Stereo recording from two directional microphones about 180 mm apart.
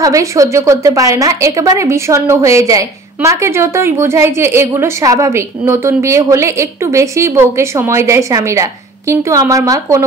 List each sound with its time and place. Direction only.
0.0 s a woman's voice: 20° right (ahead or behind)